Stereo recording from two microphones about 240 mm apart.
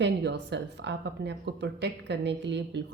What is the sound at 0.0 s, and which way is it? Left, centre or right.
A woman's voice, right.